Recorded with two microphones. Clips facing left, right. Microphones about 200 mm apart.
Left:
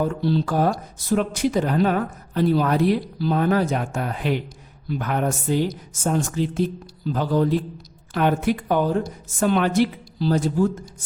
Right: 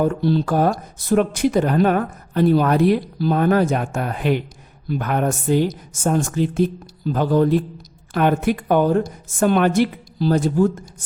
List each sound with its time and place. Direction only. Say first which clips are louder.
0.0 s speech: right 3 dB; 50° right (ahead or behind)